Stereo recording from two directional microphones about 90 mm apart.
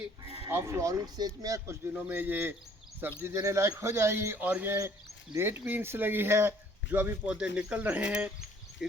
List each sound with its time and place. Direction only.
0.5 s speech: 30° right (ahead or behind)
1.0 s speech: 50° right (ahead or behind)
1.9 s speech: 20° right (ahead or behind)
4.4 s speech: 15° right (ahead or behind)
7.3 s speech: 10° right (ahead or behind)